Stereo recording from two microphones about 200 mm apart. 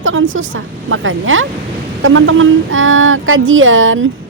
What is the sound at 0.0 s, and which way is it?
A woman's voice, 80° right.